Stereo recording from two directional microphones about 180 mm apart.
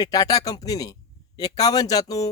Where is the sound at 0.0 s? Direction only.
20° left (ahead or behind).